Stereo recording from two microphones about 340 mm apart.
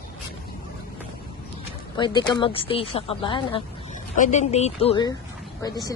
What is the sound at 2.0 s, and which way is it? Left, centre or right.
A woman's voice, centre.